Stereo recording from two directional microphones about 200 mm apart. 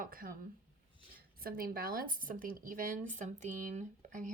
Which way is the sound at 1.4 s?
45° right (ahead or behind).